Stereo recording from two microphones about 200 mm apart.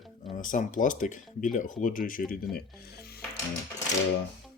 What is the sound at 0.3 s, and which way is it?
Speech, 40° left (ahead or behind).